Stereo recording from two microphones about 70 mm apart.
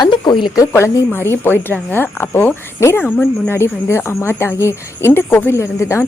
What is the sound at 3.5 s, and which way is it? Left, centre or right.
Speech, left.